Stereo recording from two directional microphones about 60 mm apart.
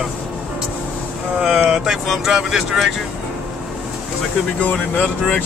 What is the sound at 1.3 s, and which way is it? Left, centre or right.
Vehicle, centre.